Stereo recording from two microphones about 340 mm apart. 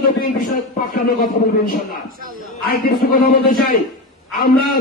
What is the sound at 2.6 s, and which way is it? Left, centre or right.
A man's voice, left.